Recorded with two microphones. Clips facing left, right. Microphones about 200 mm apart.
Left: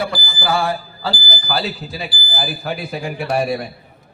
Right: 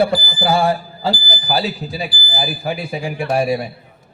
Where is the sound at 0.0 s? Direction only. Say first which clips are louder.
Right 6 dB; 25° right (ahead or behind).